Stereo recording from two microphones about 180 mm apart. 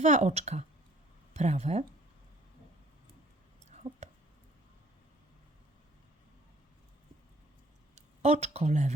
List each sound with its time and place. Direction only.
0.0 s a woman's voice: 40° right (ahead or behind)
3.7 s a sound: 35° right (ahead or behind)
7.9 s speech: 40° right (ahead or behind)